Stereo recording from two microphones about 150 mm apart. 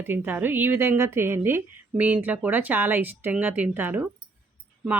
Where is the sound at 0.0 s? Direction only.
15° right (ahead or behind).